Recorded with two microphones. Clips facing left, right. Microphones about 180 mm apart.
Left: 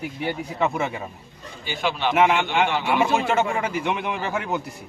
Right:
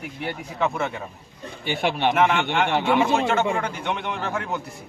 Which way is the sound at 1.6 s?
60° right (ahead or behind).